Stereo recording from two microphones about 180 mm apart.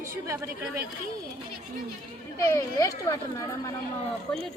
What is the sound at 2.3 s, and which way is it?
Speech, 20° left (ahead or behind).